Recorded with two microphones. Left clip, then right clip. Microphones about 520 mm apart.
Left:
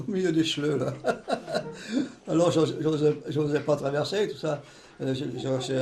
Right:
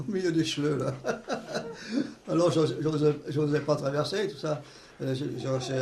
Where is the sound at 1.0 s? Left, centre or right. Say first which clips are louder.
Left 4 dB; centre.